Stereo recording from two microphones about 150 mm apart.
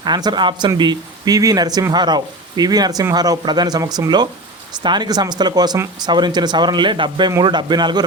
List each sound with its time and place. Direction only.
0.0 s speech: 30° right (ahead or behind)